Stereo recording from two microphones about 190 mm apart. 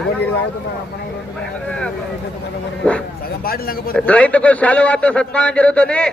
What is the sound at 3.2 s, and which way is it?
Speech, 50° left (ahead or behind).